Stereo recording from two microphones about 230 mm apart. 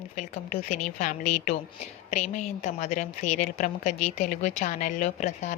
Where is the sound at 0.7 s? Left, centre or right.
Left.